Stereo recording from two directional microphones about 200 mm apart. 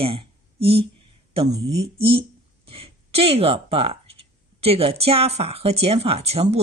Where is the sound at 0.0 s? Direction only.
30° right (ahead or behind).